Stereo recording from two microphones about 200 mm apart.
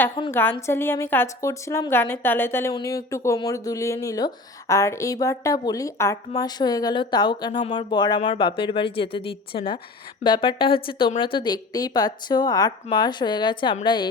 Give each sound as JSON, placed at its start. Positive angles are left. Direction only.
{"t": 0.3, "sound": "a woman's voice", "side_deg": 10}